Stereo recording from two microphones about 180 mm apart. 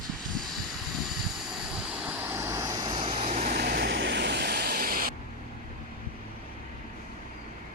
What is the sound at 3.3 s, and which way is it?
Vehicle, 50° right (ahead or behind).